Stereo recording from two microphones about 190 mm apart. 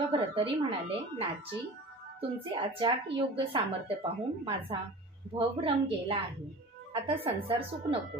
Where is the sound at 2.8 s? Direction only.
30° right (ahead or behind).